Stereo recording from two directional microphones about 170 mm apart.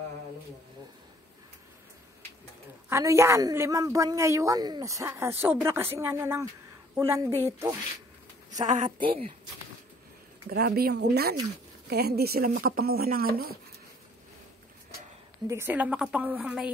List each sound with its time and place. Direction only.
2.9 s a man's voice: 15° right (ahead or behind)
8.5 s speech: 45° right (ahead or behind)
10.5 s speech: 65° right (ahead or behind)
15.4 s a man's voice: 15° right (ahead or behind)